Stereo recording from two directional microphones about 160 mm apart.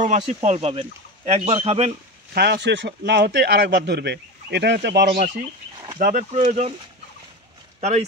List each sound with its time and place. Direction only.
0.0 s speech: 50° right (ahead or behind)
2.3 s a man's voice: 90° right
5.9 s speech: 60° right (ahead or behind)